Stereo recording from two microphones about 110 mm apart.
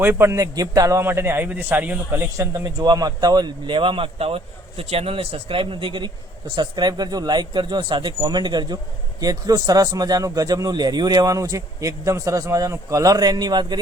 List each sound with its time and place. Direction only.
0.0 s a man's voice: 20° right (ahead or behind)
2.4 s speech: 30° right (ahead or behind); by 6.1 s 50° right (ahead or behind)
6.6 s speech: 40° right (ahead or behind)